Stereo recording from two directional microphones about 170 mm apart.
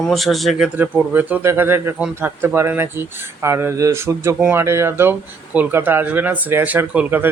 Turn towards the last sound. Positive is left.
turn(degrees=-10)  # may be behind; listen again after turning